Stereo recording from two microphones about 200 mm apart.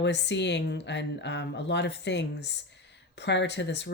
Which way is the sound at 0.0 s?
60° left (ahead or behind).